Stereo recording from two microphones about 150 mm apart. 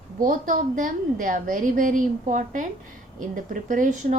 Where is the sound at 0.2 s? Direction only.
65° right (ahead or behind).